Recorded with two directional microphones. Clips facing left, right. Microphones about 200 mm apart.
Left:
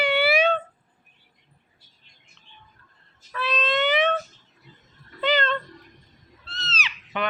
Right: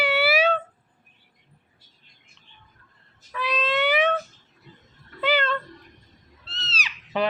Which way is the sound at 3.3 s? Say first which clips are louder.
Even; 10° right (ahead or behind).